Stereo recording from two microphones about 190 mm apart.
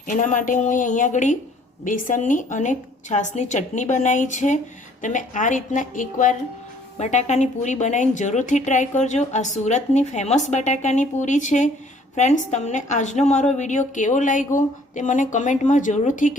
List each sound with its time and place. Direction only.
0.1 s a woman's voice: 40° left (ahead or behind)